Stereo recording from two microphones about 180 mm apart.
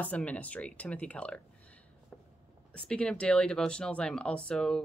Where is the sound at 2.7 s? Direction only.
5° left (ahead or behind).